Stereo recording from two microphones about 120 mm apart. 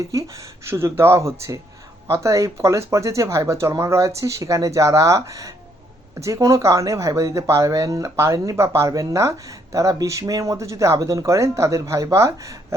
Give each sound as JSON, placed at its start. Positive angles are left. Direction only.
{"t": 0.0, "sound": "speech", "side_deg": -30}